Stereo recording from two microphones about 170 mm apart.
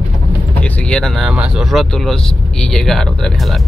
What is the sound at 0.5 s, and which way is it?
Speech, 5° left (ahead or behind).